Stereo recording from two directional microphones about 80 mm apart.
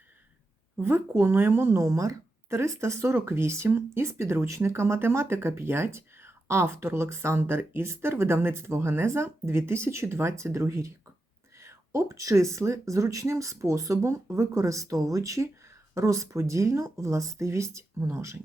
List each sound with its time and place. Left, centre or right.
0.8 s speech: right